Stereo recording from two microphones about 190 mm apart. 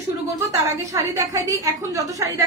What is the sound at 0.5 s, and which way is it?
A woman's voice, 15° right (ahead or behind).